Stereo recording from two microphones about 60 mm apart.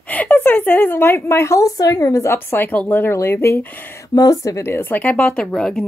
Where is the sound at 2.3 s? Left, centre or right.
Left.